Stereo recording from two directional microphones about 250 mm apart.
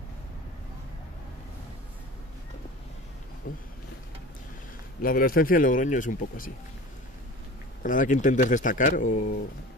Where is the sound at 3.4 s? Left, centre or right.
Left.